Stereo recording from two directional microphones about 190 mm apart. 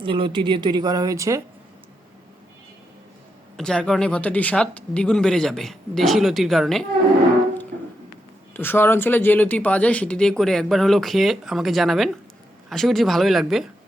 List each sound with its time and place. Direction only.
0.0 s speech: 25° right (ahead or behind)
3.6 s speech: 5° left (ahead or behind)
8.5 s speech: 10° left (ahead or behind)